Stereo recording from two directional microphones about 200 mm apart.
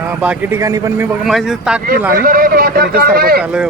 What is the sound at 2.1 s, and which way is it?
A man's voice, 45° right (ahead or behind).